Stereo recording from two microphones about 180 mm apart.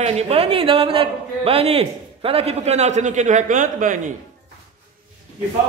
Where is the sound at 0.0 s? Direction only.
35° right (ahead or behind).